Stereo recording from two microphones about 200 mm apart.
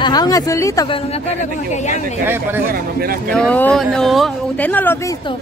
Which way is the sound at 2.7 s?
45° right (ahead or behind).